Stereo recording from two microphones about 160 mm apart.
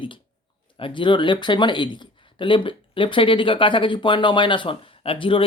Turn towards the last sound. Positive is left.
turn(degrees=35)  # may be behind; listen again after turning